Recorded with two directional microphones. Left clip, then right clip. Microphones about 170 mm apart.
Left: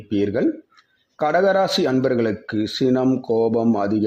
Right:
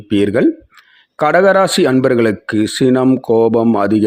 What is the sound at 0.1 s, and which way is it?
Speech, 35° right (ahead or behind).